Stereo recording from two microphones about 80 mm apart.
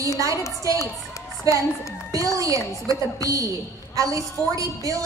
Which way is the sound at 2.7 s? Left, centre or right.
Right.